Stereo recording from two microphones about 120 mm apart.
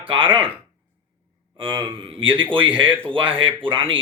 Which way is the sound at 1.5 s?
35° right (ahead or behind).